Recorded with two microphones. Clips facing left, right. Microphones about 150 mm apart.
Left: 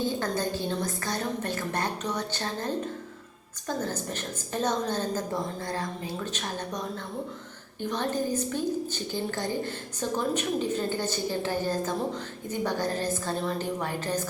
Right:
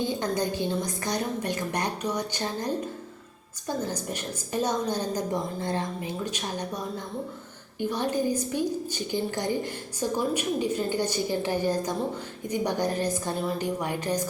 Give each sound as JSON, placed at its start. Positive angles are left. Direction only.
{"t": 0.2, "sound": "a woman's voice", "side_deg": -15}
{"t": 3.8, "sound": "a woman's voice", "side_deg": -10}